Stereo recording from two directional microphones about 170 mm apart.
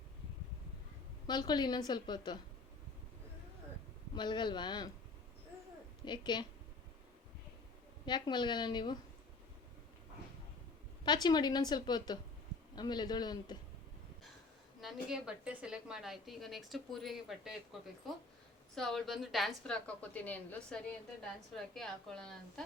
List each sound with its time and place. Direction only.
1.3 s a woman's voice: 25° left (ahead or behind)
4.1 s a woman's voice: 25° left (ahead or behind)
6.1 s a woman's voice: 25° left (ahead or behind)
8.0 s a woman's voice: 25° left (ahead or behind)
11.0 s a woman's voice: 25° left (ahead or behind)
14.8 s a woman's voice: centre (ahead or behind)